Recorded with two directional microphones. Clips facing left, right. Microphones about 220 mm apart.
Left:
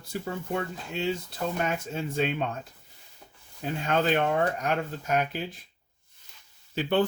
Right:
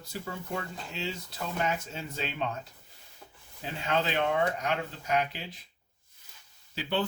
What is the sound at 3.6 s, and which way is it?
Speech, 50° left (ahead or behind).